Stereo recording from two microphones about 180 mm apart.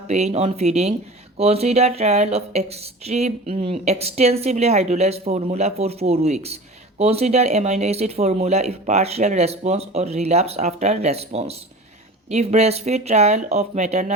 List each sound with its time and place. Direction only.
0.1 s speech: 35° right (ahead or behind)